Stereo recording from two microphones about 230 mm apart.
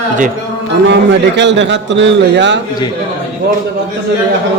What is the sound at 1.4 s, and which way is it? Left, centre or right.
A man's voice, right.